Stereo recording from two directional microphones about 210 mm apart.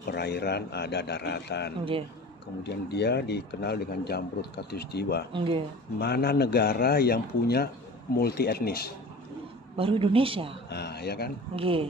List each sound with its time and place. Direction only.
0.0 s speech: 50° left (ahead or behind)
5.3 s a woman's voice: 25° right (ahead or behind)
5.9 s speech: 50° left (ahead or behind)
9.8 s a woman's voice: 25° right (ahead or behind)
10.7 s speech: 50° left (ahead or behind)
11.5 s a woman's voice: 25° right (ahead or behind)